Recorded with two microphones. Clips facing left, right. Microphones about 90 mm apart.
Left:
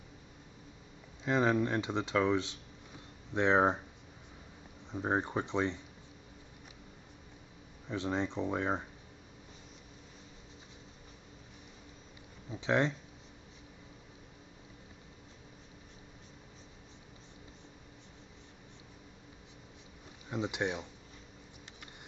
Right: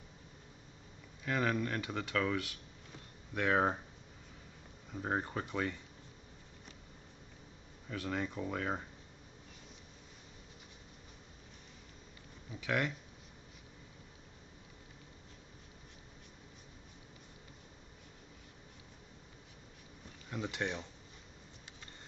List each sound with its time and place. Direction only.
1.2 s speech: 20° left (ahead or behind)
4.9 s speech: 25° left (ahead or behind)
7.9 s speech: 20° left (ahead or behind)
12.4 s speech: 25° left (ahead or behind)
20.2 s speech: 20° left (ahead or behind)